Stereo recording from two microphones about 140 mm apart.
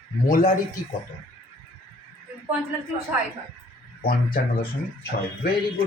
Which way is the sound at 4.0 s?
90° left.